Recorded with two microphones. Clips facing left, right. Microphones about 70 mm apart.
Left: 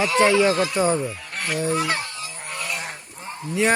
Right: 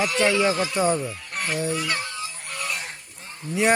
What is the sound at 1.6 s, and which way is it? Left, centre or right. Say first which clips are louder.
Goose: left 6 dB; left.